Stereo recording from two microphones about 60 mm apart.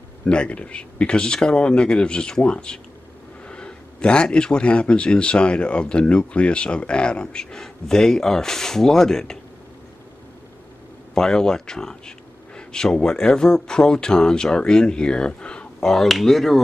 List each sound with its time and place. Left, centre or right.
0.2 s a man's voice: centre
11.1 s a man's voice: centre
15.9 s speech: centre